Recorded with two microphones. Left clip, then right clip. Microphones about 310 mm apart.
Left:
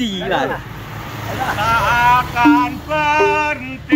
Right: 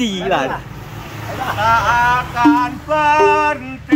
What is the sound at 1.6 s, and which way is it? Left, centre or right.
Music, right.